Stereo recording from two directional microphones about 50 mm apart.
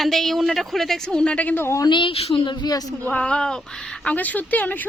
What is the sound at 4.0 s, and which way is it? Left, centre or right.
Speech, left.